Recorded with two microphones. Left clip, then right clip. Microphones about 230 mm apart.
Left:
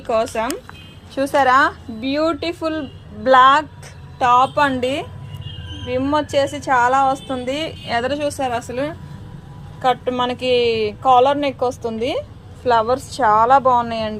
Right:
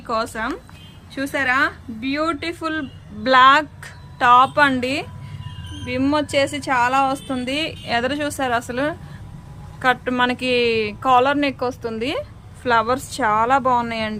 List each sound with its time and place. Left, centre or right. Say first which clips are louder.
0.1 s a woman's voice: left 4 dB; centre
1.2 s speech: left 5 dB; centre
2.0 s a woman's voice: left 3 dB; centre